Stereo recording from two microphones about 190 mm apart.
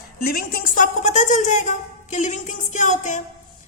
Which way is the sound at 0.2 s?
50° left (ahead or behind).